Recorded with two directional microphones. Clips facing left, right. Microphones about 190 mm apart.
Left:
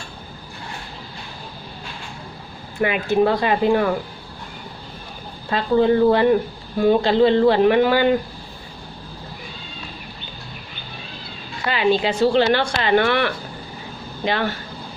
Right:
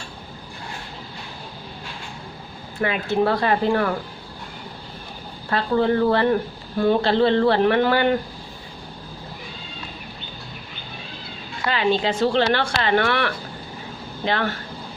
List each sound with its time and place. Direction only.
2.8 s speech: 15° left (ahead or behind)
5.5 s speech: 15° left (ahead or behind)
11.7 s speech: 10° left (ahead or behind)